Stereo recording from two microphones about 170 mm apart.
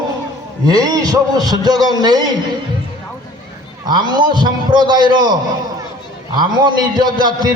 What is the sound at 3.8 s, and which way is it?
A man's voice, 25° right (ahead or behind).